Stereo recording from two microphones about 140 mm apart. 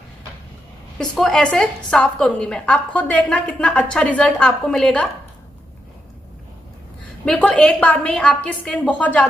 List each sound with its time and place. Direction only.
0.9 s a woman's voice: 5° left (ahead or behind)
7.2 s a woman's voice: 5° left (ahead or behind)